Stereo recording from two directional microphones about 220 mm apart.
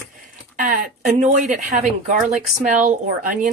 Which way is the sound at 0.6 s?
35° right (ahead or behind).